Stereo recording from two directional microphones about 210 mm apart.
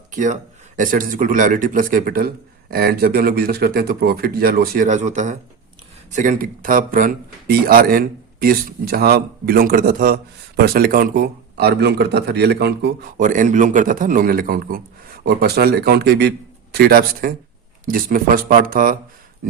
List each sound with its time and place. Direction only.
0.1 s speech: 35° right (ahead or behind)